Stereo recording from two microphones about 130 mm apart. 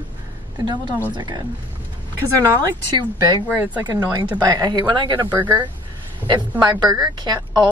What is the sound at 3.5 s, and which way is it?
Speech, 10° right (ahead or behind).